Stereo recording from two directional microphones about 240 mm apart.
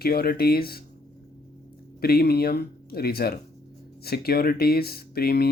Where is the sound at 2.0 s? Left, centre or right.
Left.